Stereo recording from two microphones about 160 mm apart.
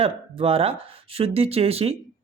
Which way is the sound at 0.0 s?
35° right (ahead or behind).